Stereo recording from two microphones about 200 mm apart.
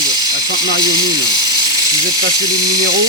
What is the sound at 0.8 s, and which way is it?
Speech, 20° right (ahead or behind).